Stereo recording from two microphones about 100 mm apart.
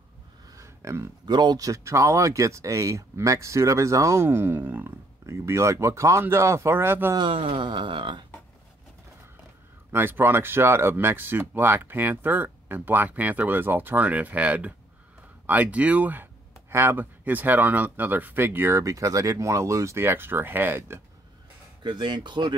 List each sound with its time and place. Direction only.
0.6 s a sound: 30° right (ahead or behind)
1.2 s speech: 45° right (ahead or behind); by 7.2 s 20° right (ahead or behind)
7.2 s speech: 60° right (ahead or behind)
9.9 s speech: 20° right (ahead or behind)
21.8 s speech: 50° right (ahead or behind)